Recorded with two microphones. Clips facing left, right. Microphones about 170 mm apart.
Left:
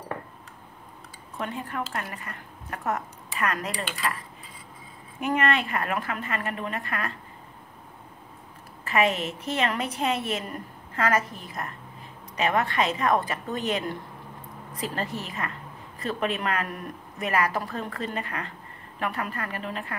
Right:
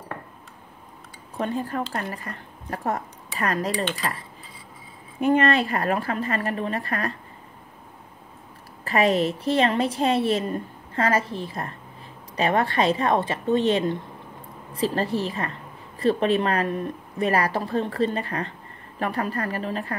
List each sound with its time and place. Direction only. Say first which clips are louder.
1.4 s a woman's voice: right 5 dB; 35° right (ahead or behind)
5.2 s a woman's voice: right 5 dB; 35° right (ahead or behind)
8.8 s a woman's voice: right 4 dB; 35° right (ahead or behind)